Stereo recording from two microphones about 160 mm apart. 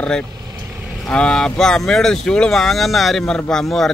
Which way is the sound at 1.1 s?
5° left (ahead or behind).